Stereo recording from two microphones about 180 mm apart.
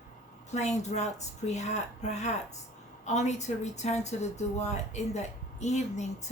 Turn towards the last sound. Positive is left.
turn(degrees=40)  # may be behind; listen again after turning